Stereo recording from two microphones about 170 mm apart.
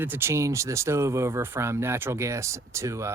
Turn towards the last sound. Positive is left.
turn(degrees=-15)  # may be behind; listen again after turning